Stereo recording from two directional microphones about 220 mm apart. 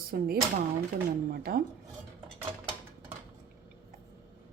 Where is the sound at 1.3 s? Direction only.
45° right (ahead or behind).